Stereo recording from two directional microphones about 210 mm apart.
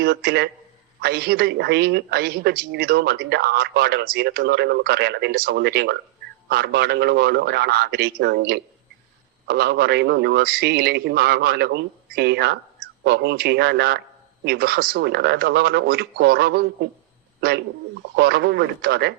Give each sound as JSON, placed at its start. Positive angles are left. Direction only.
{"t": 0.0, "sound": "a woman's voice", "side_deg": -50}
{"t": 18.2, "sound": "a woman's voice", "side_deg": -50}